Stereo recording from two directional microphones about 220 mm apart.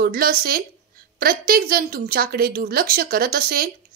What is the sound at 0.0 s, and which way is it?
A woman's voice, 40° right (ahead or behind).